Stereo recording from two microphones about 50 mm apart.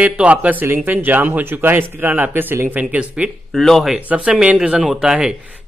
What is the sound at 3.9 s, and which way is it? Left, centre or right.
Speech, right.